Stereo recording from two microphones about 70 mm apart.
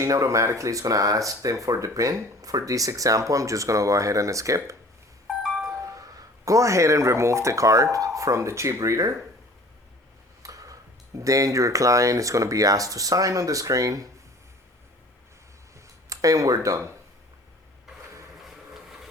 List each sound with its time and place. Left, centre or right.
0.0 s speech: right
5.8 s speech: right
10.4 s speech: right
16.0 s speech: right
18.4 s vehicle: centre